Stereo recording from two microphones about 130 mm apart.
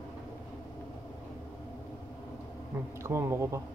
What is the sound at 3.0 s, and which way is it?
Speech, 20° right (ahead or behind).